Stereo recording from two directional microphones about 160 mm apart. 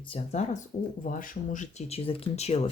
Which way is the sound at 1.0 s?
60° left (ahead or behind).